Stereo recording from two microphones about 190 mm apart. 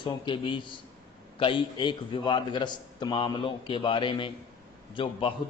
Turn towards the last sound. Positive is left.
turn(degrees=25)  # may be behind; listen again after turning